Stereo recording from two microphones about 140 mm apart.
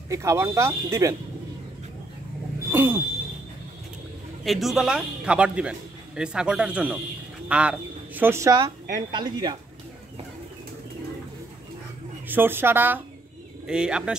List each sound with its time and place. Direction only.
0.1 s speech: 20° right (ahead or behind)
2.7 s a man's voice: 15° right (ahead or behind)
4.5 s a man's voice: centre (ahead or behind); by 9.6 s 35° right (ahead or behind)
12.3 s a man's voice: 15° right (ahead or behind)